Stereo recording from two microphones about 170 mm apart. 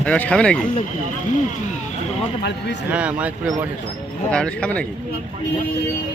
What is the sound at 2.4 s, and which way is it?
Speech, 85° left.